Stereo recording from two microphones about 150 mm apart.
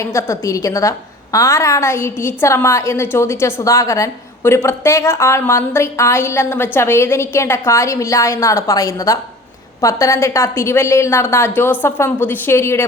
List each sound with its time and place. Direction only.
0.0 s a woman's voice: 20° left (ahead or behind)